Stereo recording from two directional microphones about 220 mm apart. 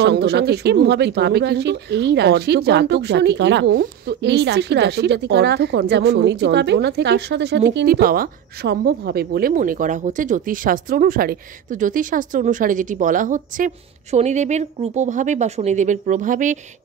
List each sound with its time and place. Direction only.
0.0 s speech: 50° right (ahead or behind)